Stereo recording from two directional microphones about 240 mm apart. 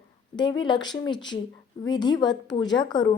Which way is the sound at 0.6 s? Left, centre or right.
Centre.